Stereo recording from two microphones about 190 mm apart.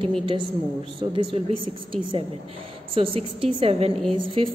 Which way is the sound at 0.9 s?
25° right (ahead or behind).